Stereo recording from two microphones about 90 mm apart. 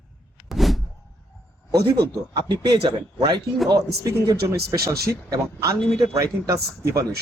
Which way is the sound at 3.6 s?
45° right (ahead or behind).